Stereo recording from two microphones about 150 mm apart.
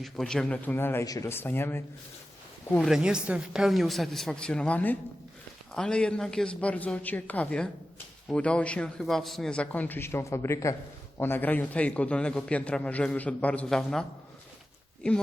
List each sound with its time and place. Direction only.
0.0 s a man's voice: 5° left (ahead or behind)
2.8 s a woman's voice: 5° right (ahead or behind)
15.0 s a man's voice: 5° left (ahead or behind)